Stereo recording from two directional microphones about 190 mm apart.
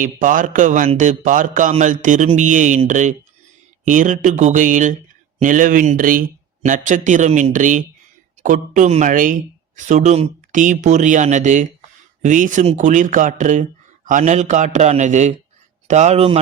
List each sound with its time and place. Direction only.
0.0 s speech: 45° right (ahead or behind)